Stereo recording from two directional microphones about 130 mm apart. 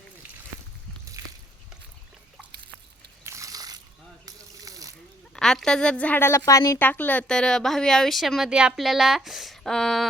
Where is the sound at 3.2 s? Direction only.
25° right (ahead or behind).